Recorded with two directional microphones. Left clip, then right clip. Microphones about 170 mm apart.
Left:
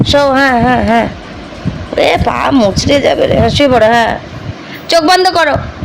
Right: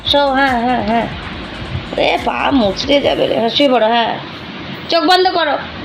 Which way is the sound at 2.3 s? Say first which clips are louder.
Left 4 dB; 40° left (ahead or behind).